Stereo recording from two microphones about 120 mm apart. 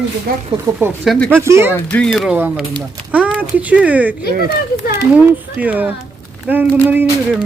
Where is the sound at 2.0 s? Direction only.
10° left (ahead or behind).